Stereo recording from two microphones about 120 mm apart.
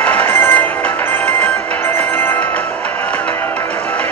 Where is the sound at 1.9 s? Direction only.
15° left (ahead or behind).